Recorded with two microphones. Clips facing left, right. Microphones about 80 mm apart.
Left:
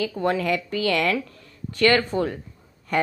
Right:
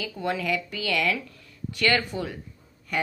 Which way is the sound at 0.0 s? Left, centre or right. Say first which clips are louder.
Left 5 dB; left.